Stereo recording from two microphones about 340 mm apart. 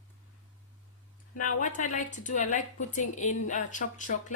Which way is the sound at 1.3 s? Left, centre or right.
Left.